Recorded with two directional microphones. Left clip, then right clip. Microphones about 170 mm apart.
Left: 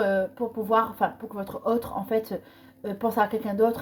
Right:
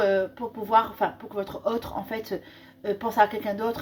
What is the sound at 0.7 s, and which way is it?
Speech, 45° left (ahead or behind).